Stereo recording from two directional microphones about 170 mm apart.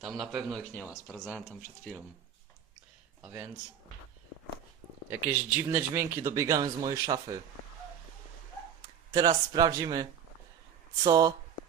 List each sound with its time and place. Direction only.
0.0 s speech: centre (ahead or behind)
3.2 s speech: 10° right (ahead or behind)
5.0 s speech: 15° right (ahead or behind)
9.1 s speech: 25° right (ahead or behind)